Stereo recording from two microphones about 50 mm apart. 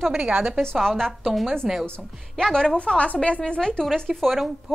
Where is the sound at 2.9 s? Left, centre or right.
Left; by 4.3 s centre.